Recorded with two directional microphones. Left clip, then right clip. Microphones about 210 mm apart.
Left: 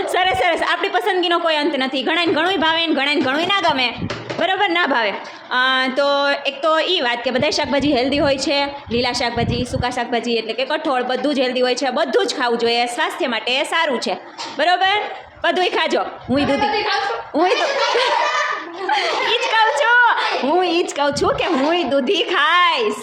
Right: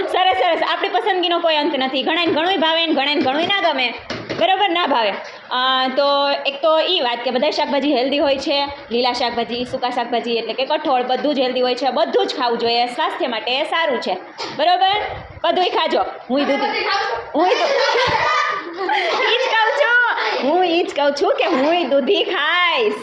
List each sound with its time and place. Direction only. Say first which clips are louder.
0.0 s a woman's voice: right 1 dB; 10° left (ahead or behind)
18.9 s a woman's voice: even; 15° left (ahead or behind)